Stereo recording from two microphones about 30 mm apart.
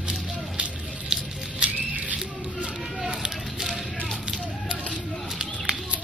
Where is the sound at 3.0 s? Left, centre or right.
Right.